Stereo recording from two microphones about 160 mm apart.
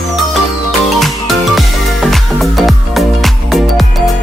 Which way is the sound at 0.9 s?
Centre (ahead or behind).